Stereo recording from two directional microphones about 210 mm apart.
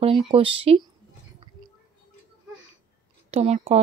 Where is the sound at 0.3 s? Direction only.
25° right (ahead or behind).